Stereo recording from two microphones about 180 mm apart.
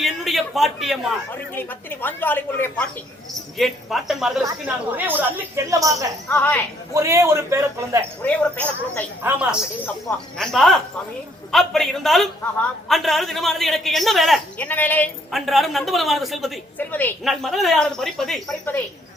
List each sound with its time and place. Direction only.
0.0 s a sound: centre (ahead or behind)
1.3 s speech: 10° left (ahead or behind)
3.6 s a man's voice: centre (ahead or behind); by 6.1 s 20° right (ahead or behind)
6.2 s speech: 10° left (ahead or behind)
6.9 s a woman's voice: 15° right (ahead or behind)
8.2 s speech: 10° left (ahead or behind)
9.2 s a woman's voice: 5° right (ahead or behind); by 15.1 s 10° left (ahead or behind)
15.3 s a man's voice: centre (ahead or behind)
16.7 s a man's voice: 10° left (ahead or behind)